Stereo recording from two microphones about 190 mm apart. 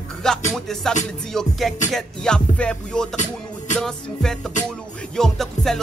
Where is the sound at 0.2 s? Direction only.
5° left (ahead or behind).